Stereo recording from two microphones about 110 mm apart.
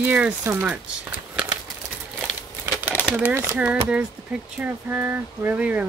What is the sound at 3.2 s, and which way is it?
Speech, 15° right (ahead or behind).